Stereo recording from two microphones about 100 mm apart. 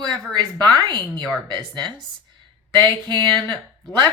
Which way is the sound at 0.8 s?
45° right (ahead or behind).